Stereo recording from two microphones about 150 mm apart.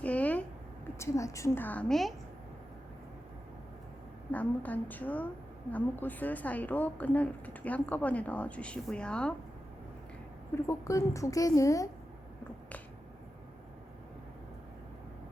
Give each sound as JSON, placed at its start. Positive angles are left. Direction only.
{"t": 0.0, "sound": "a sound", "side_deg": 10}
{"t": 0.9, "sound": "speech", "side_deg": 20}
{"t": 4.3, "sound": "speech", "side_deg": 10}
{"t": 10.5, "sound": "a woman's voice", "side_deg": 20}